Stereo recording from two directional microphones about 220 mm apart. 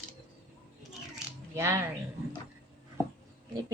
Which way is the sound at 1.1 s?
10° right (ahead or behind).